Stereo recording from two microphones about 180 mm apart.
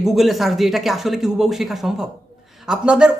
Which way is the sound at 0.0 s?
Centre (ahead or behind).